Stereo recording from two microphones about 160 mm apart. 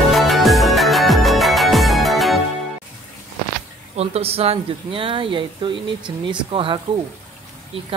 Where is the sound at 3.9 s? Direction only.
40° right (ahead or behind).